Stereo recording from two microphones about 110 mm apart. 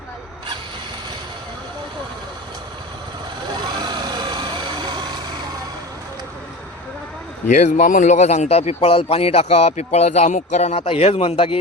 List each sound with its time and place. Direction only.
3.8 s vehicle: 40° right (ahead or behind)
7.5 s speech: 90° left; by 11.5 s 60° left (ahead or behind)